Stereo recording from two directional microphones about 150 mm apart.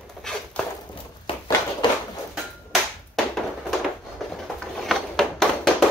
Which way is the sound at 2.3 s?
Centre (ahead or behind).